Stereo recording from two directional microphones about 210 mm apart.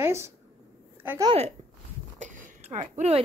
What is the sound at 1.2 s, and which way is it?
Speech, 25° right (ahead or behind).